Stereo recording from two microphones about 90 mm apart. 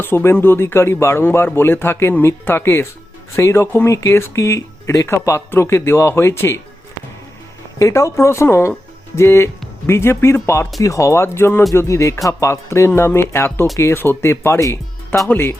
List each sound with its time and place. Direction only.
0.0 s speech: 25° left (ahead or behind)
7.8 s speech: 35° left (ahead or behind)